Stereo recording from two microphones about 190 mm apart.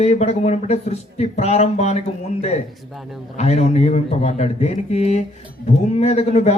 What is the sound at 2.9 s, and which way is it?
Speech, centre (ahead or behind).